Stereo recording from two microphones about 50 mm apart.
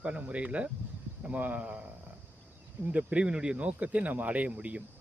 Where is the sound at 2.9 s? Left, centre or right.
Right.